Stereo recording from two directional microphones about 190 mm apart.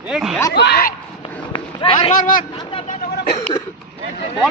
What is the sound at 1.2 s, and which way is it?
Run, 25° left (ahead or behind).